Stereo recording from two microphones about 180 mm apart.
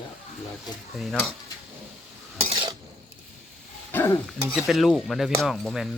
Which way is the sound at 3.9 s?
10° left (ahead or behind).